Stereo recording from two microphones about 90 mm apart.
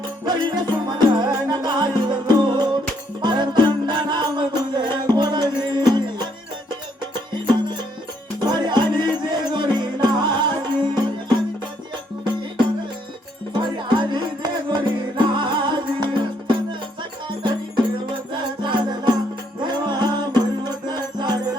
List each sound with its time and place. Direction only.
0.3 s music: 60° right (ahead or behind)
8.4 s music: 55° right (ahead or behind)
13.6 s music: 60° right (ahead or behind)
18.6 s music: 60° right (ahead or behind)